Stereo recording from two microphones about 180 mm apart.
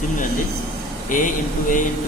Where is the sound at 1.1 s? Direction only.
45° left (ahead or behind).